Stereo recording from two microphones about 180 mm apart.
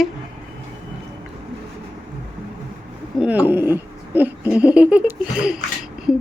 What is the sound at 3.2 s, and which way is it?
Laughter, 10° right (ahead or behind).